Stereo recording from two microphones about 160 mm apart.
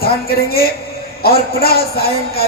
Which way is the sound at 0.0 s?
75° left (ahead or behind).